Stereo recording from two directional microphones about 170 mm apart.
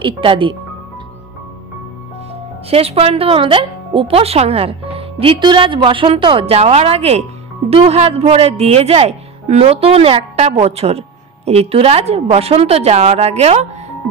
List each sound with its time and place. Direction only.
0.0 s speech: 30° right (ahead or behind)
2.7 s speech: 35° right (ahead or behind)